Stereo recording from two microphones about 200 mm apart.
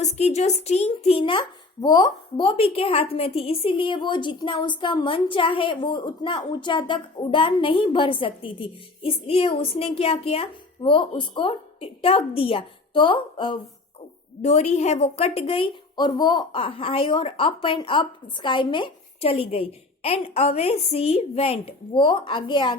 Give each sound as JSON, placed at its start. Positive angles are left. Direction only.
{"t": 0.0, "sound": "speech", "side_deg": 35}
{"t": 14.4, "sound": "speech", "side_deg": 35}